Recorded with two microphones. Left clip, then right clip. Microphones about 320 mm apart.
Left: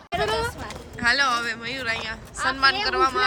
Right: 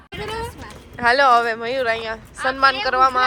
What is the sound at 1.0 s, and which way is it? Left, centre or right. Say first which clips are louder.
Speech: right 7 dB; centre.